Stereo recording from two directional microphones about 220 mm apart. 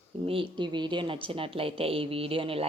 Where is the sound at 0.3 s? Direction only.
20° right (ahead or behind).